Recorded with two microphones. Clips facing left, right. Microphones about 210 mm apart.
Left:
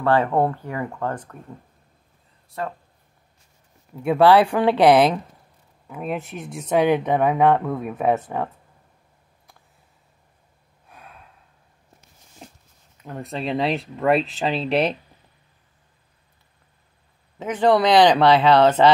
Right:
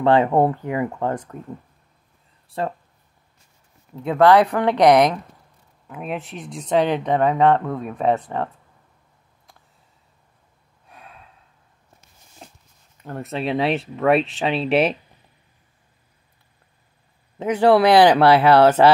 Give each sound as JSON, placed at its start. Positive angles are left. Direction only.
{"t": 0.0, "sound": "speech", "side_deg": -20}
{"t": 2.6, "sound": "speech", "side_deg": -30}
{"t": 3.9, "sound": "speech", "side_deg": 10}
{"t": 5.9, "sound": "speech", "side_deg": 0}
{"t": 13.0, "sound": "speech", "side_deg": 0}
{"t": 17.4, "sound": "speech", "side_deg": -10}